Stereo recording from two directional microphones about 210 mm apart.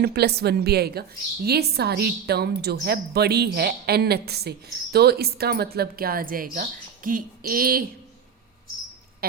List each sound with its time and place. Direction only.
0.0 s a woman's voice: 50° right (ahead or behind)